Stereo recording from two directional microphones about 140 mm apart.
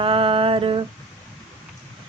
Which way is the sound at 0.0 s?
40° right (ahead or behind).